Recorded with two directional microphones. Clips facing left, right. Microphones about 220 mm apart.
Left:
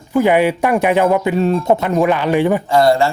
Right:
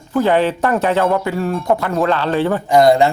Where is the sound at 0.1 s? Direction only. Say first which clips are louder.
Left 2 dB; 10° left (ahead or behind).